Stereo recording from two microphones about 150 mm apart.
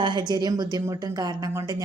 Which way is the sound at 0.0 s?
30° right (ahead or behind).